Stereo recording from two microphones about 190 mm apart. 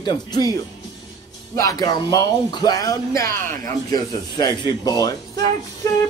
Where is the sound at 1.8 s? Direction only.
20° left (ahead or behind).